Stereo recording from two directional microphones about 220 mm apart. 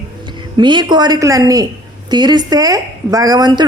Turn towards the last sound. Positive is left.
turn(degrees=-15)  # may be behind; listen again after turning